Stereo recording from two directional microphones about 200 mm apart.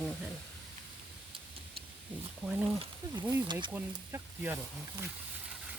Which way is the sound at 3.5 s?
25° right (ahead or behind).